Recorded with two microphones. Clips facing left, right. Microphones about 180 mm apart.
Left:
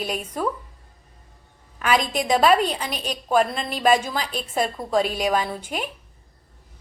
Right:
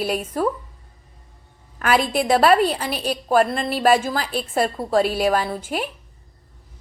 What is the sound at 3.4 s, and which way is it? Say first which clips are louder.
Speech: right 3 dB; 50° right (ahead or behind).